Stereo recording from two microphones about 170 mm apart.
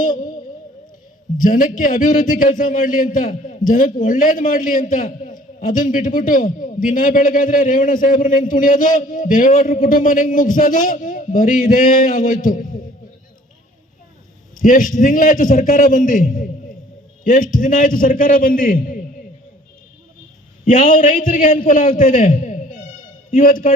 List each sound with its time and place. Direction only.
1.4 s a man's voice: 50° left (ahead or behind)
14.6 s a man's voice: 50° left (ahead or behind)
20.7 s a man's voice: 50° left (ahead or behind)